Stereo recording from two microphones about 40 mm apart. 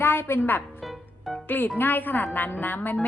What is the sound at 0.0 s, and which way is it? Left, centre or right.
A woman's voice, left.